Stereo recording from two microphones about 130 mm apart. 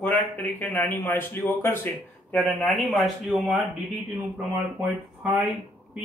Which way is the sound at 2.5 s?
Centre (ahead or behind).